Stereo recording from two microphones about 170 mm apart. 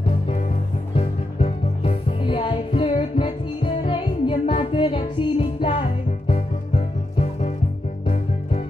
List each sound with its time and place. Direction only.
0.9 s music: 35° left (ahead or behind)